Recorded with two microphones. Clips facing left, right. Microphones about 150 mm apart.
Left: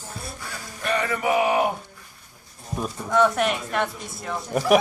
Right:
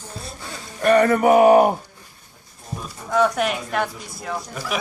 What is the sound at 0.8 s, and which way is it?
Speech, 50° right (ahead or behind).